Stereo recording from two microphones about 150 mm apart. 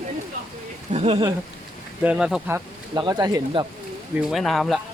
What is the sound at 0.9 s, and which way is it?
Speech, 45° right (ahead or behind).